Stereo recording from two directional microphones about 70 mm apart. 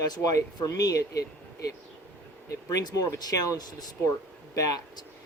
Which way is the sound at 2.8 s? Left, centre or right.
Left.